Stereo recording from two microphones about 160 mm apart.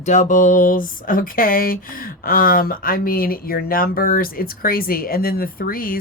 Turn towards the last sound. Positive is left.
turn(degrees=65)  # may be behind; listen again after turning